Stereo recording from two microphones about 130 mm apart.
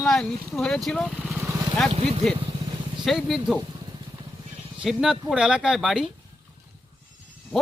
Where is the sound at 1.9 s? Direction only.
50° right (ahead or behind).